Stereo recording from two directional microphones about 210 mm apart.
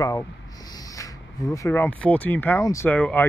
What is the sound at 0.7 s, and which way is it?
Speech, 15° left (ahead or behind).